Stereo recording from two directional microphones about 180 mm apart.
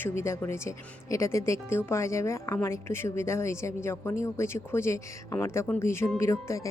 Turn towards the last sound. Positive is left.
turn(degrees=15)  # may be behind; listen again after turning